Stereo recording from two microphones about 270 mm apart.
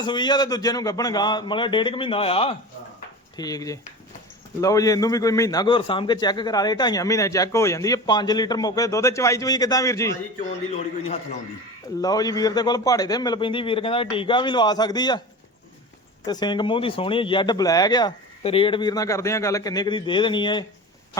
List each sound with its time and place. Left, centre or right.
0.0 s a man's voice: centre
12.0 s a man's voice: centre
16.2 s a man's voice: centre